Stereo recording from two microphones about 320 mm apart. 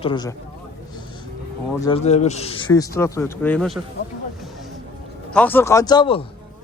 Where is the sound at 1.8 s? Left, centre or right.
Centre.